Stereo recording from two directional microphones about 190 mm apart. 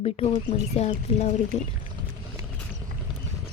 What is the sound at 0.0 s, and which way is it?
A woman's voice, 30° left (ahead or behind).